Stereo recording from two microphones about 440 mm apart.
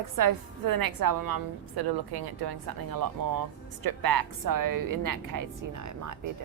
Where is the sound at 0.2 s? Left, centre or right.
Right.